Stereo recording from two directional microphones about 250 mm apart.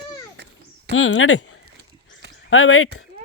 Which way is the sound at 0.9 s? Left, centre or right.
Left.